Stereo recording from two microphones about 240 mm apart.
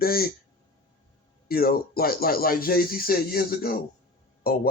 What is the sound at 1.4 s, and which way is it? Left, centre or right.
Speech, left.